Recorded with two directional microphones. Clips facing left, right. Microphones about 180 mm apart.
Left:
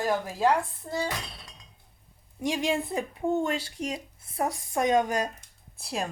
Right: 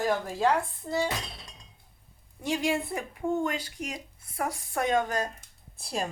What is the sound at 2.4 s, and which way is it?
Speech, 15° left (ahead or behind).